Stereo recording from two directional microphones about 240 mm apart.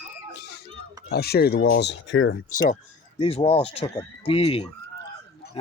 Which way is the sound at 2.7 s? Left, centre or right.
Left.